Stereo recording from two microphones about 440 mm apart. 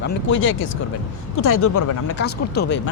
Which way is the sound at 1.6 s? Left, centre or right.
Left.